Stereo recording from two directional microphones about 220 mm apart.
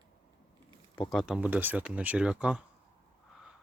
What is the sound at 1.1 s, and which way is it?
Speech, 5° right (ahead or behind).